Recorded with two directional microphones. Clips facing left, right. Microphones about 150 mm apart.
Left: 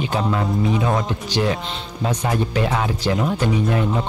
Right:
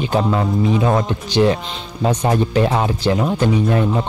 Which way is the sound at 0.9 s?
25° right (ahead or behind).